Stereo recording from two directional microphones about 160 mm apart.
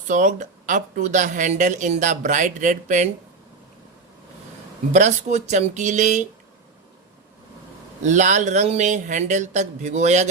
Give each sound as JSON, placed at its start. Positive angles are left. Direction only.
{"t": 0.1, "sound": "a woman's voice", "side_deg": -50}
{"t": 4.9, "sound": "a woman's voice", "side_deg": -45}
{"t": 8.0, "sound": "a woman's voice", "side_deg": -50}